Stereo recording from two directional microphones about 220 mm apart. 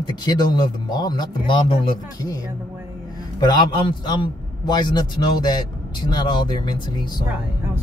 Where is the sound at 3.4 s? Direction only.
20° left (ahead or behind).